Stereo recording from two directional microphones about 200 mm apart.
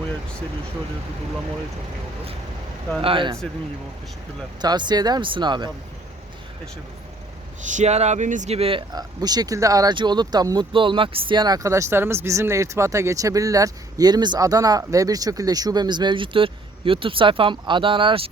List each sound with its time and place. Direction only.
3.0 s speech: 25° right (ahead or behind)
4.6 s speech: 20° right (ahead or behind)
7.6 s speech: 40° right (ahead or behind)